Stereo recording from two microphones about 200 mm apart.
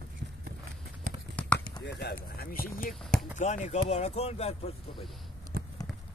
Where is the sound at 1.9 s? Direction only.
55° left (ahead or behind).